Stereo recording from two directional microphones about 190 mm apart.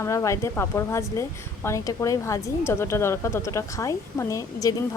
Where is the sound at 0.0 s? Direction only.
15° left (ahead or behind).